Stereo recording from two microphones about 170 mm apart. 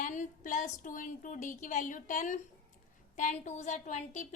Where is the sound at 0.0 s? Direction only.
50° left (ahead or behind).